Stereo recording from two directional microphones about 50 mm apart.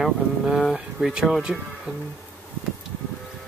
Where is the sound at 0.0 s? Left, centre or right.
Centre.